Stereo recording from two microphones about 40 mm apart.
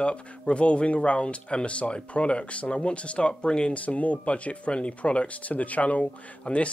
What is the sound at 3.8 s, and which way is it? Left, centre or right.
Speech, left.